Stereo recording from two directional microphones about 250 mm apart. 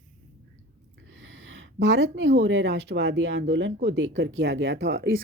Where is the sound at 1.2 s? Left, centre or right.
Right.